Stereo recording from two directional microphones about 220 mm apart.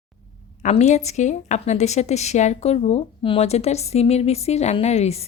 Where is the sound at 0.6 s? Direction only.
30° left (ahead or behind).